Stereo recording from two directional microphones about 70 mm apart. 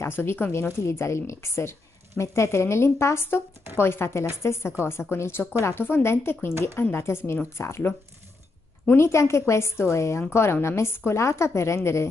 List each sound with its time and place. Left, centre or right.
0.0 s a woman's voice: left